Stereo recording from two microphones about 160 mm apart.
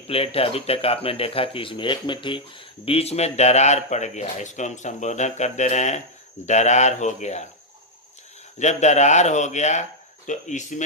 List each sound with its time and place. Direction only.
0.1 s speech: 35° left (ahead or behind)
8.5 s speech: 45° left (ahead or behind)